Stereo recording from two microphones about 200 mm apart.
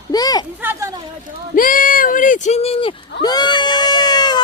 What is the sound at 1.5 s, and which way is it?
Speech, 45° left (ahead or behind).